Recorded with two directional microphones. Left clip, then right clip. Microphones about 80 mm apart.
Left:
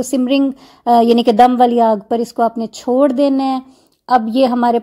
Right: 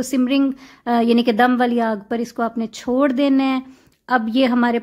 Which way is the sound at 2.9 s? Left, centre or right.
Left.